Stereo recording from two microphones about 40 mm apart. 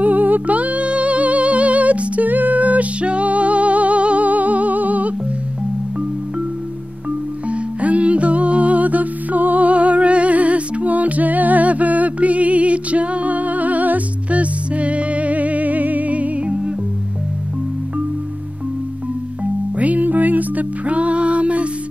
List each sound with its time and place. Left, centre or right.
0.0 s music: right
7.4 s music: right
19.8 s music: right